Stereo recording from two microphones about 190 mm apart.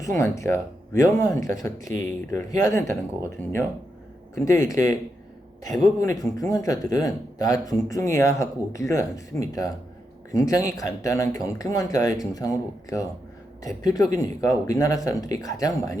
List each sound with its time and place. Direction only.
0.0 s speech: 15° left (ahead or behind)
6.0 s speech: 15° left (ahead or behind)